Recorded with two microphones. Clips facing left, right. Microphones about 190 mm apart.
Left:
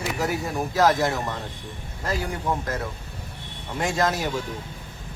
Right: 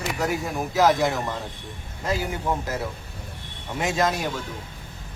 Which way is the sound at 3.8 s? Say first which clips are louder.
Even; centre (ahead or behind).